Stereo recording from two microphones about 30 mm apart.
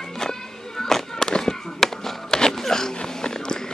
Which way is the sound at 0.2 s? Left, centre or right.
Centre.